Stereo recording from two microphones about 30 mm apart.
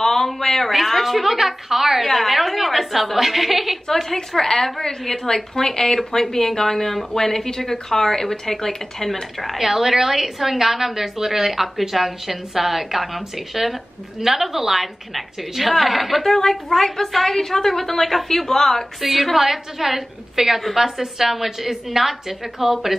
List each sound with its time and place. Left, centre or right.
0.0 s a sound: centre
0.7 s a woman's voice: centre
3.8 s a woman's voice: centre
9.6 s a woman's voice: centre
16.3 s a woman's voice: centre
18.9 s a woman's voice: centre